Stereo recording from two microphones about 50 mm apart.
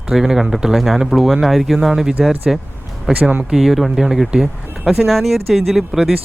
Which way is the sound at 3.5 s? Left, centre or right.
Centre.